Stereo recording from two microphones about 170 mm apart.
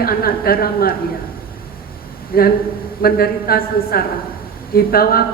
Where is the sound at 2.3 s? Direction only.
60° left (ahead or behind).